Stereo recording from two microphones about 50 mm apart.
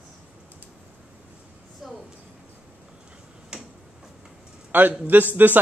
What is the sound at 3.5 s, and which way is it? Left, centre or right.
Tick-tock, centre.